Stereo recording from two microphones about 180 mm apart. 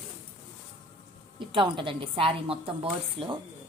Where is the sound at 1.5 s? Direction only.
30° right (ahead or behind).